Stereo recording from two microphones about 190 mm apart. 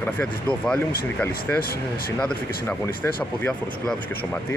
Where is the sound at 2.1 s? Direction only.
10° left (ahead or behind).